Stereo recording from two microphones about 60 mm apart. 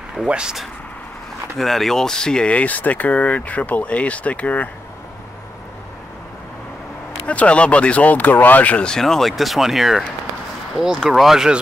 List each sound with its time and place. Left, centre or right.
0.2 s speech: centre
1.6 s speech: centre; by 4.6 s left
7.2 s speech: left
8.9 s speech: centre
11.1 s speech: centre